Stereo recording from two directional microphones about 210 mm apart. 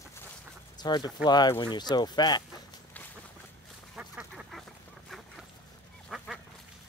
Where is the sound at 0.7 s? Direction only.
20° left (ahead or behind).